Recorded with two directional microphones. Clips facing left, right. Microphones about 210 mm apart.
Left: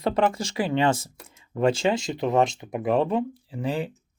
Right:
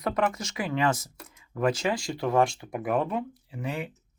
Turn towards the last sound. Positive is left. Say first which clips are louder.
# left 5 dB
turn(degrees=30)  # may be behind; listen again after turning